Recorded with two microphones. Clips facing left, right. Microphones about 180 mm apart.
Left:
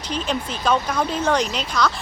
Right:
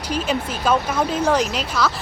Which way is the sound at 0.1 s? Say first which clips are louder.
Right 2 dB; 5° right (ahead or behind).